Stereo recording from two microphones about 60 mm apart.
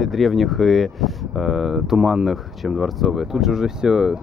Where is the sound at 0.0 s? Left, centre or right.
Centre.